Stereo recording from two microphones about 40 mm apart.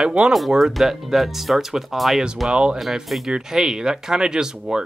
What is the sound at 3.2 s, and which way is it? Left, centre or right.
Speech, centre.